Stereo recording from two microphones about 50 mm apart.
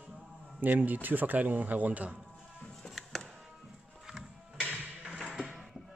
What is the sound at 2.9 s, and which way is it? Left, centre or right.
Music, centre.